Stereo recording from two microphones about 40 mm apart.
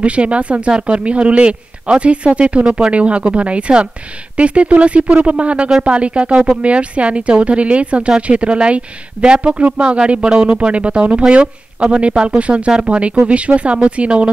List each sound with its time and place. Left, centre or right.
0.0 s speech: right